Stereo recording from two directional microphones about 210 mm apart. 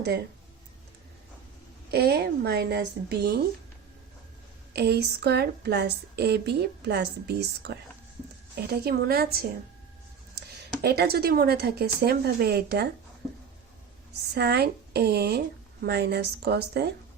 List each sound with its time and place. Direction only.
1.9 s speech: 50° right (ahead or behind)
4.7 s speech: 50° right (ahead or behind)
10.8 s speech: 50° right (ahead or behind)
14.3 s speech: 50° right (ahead or behind)